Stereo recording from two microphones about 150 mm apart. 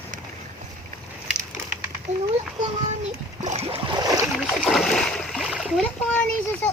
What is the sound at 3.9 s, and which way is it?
Boat, 25° right (ahead or behind).